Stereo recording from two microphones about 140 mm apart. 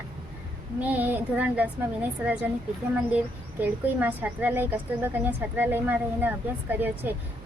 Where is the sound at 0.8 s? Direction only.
10° right (ahead or behind).